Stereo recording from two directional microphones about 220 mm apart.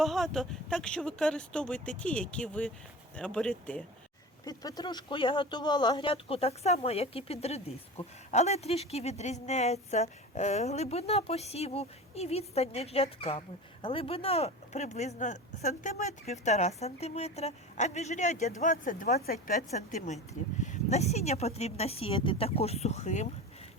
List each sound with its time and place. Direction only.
0.0 s speech: centre (ahead or behind)
4.4 s speech: 15° left (ahead or behind)